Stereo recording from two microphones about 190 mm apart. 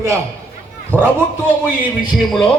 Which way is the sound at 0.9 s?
10° left (ahead or behind).